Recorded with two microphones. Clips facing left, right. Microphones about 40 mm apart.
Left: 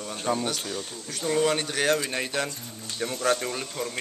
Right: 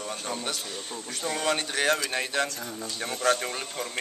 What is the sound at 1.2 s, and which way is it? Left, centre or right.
A man's voice, centre.